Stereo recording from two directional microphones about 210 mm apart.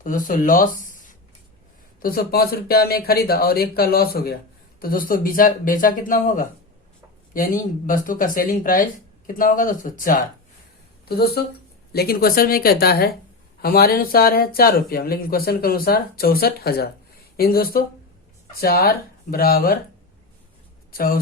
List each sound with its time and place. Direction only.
0.0 s speech: 40° left (ahead or behind)
20.9 s speech: 45° left (ahead or behind)